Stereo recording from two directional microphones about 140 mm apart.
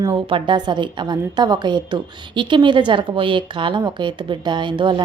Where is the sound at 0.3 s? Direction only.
35° right (ahead or behind).